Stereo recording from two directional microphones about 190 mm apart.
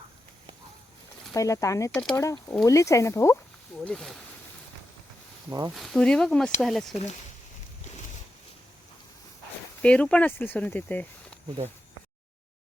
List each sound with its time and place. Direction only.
1.3 s speech: 15° left (ahead or behind)
3.8 s speech: centre (ahead or behind)
5.5 s speech: 20° right (ahead or behind)
5.7 s speech: centre (ahead or behind)
9.8 s speech: 5° left (ahead or behind)